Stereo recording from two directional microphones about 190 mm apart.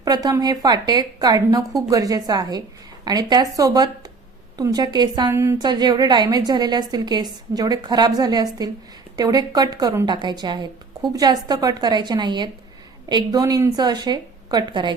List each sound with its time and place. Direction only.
0.0 s a woman's voice: 20° right (ahead or behind)